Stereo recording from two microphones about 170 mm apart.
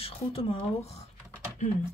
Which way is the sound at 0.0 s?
35° left (ahead or behind).